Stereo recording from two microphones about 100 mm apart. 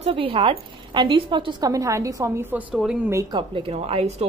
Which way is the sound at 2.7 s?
Centre (ahead or behind).